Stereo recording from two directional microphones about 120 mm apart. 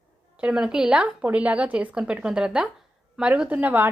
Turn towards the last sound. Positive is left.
turn(degrees=-15)  # may be behind; listen again after turning